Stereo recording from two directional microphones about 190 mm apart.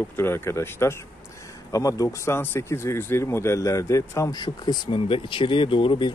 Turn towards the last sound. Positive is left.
turn(degrees=25)  # may be behind; listen again after turning